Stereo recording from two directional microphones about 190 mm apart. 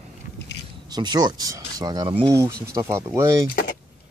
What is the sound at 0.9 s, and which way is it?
Speech, 20° right (ahead or behind).